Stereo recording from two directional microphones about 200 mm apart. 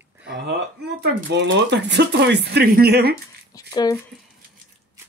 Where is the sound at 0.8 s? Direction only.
55° right (ahead or behind).